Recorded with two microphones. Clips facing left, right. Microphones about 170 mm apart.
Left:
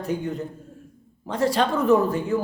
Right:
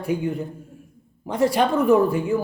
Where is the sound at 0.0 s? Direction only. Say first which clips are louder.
Right 3 dB; 10° right (ahead or behind).